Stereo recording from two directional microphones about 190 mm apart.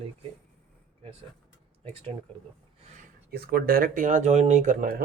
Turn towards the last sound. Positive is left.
turn(degrees=-45)  # may be behind; listen again after turning